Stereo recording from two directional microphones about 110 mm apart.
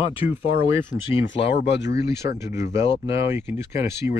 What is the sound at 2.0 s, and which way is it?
Speech, 25° right (ahead or behind).